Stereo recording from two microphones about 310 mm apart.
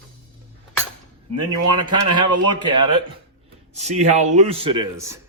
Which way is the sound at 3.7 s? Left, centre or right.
Right.